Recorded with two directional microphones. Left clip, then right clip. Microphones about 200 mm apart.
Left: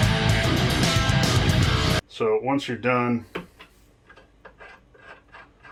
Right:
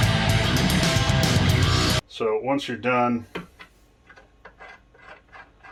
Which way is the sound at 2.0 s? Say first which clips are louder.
Left 1 dB; 20° left (ahead or behind).